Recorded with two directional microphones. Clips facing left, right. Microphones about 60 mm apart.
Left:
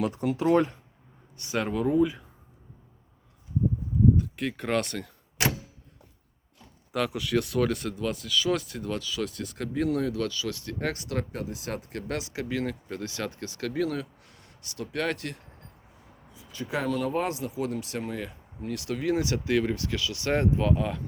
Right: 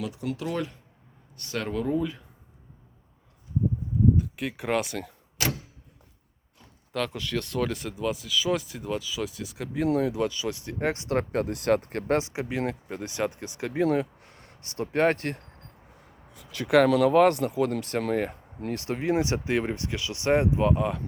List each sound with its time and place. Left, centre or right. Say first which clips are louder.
0.0 s speech: left 5 dB; left
1.4 s speech: left 2 dB; centre
4.2 s speech: even; centre
6.9 s speech: left 3 dB; centre; by 11.2 s right
11.2 s speech: right 6 dB; right
16.3 s speech: right 11 dB; right; by 21.0 s centre